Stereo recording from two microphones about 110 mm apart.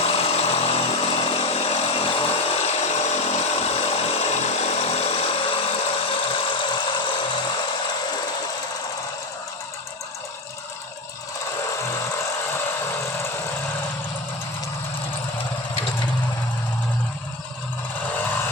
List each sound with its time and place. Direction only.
0.0 s chainsaw: 65° left (ahead or behind)
6.2 s a sound: 50° left (ahead or behind)
18.0 s vehicle: 15° left (ahead or behind)